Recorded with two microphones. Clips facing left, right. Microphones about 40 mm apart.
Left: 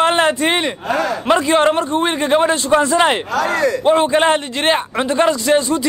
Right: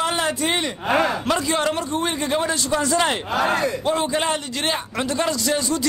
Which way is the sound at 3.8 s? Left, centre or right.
Left.